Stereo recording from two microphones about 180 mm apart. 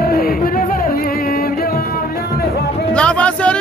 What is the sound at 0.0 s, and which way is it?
Music, 55° left (ahead or behind).